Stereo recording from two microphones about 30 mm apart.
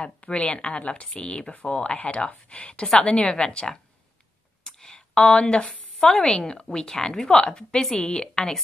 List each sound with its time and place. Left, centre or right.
0.3 s a woman's voice: left
0.8 s speech: left
1.4 s speech: left
1.7 s a woman's voice: left
3.3 s a woman's voice: left
4.6 s a sound: left
5.2 s a woman's voice: left
5.9 s a woman's voice: left
7.8 s a woman's voice: centre